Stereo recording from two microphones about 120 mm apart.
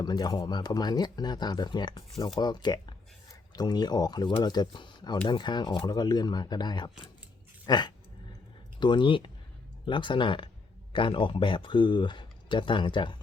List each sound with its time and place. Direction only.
0.0 s speech: 35° left (ahead or behind)